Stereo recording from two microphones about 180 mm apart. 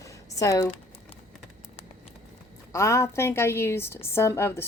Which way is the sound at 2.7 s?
15° left (ahead or behind).